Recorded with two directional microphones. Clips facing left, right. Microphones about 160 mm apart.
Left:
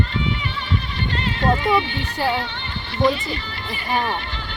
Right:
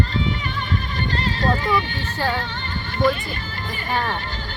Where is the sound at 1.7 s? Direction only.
15° left (ahead or behind).